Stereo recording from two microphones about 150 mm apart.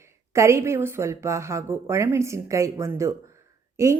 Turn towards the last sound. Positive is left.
turn(degrees=-20)  # may be behind; listen again after turning